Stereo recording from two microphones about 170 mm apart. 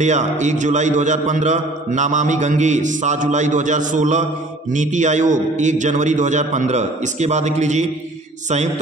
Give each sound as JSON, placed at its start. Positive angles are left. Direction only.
{"t": 0.0, "sound": "a man's voice", "side_deg": -45}